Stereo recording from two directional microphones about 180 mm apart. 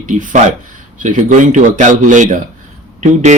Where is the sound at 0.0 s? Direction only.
45° right (ahead or behind).